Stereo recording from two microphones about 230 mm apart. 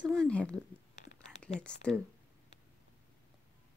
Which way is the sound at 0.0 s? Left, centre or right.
Centre.